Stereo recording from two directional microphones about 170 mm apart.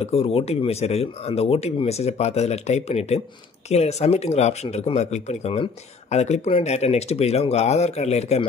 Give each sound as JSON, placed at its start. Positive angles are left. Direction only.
{"t": 0.0, "sound": "speech", "side_deg": 35}